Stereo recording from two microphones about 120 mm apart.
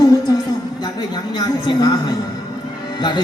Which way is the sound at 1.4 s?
35° left (ahead or behind).